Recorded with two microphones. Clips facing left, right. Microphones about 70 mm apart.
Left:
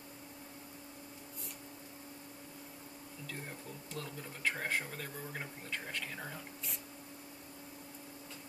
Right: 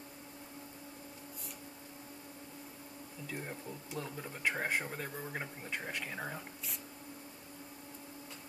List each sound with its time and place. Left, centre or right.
3.3 s speech: centre